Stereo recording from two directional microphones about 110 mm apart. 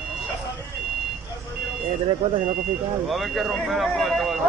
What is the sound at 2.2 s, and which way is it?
Speech, 60° right (ahead or behind).